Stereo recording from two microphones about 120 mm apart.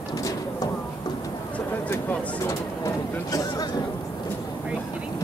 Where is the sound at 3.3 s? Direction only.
30° left (ahead or behind).